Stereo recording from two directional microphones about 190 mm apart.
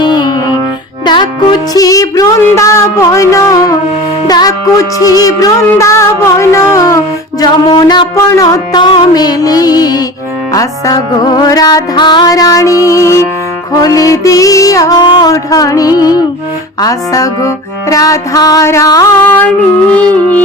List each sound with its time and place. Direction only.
0.0 s music: 20° left (ahead or behind)